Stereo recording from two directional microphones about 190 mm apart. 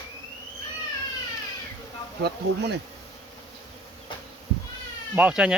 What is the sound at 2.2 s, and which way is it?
Speech, 60° right (ahead or behind).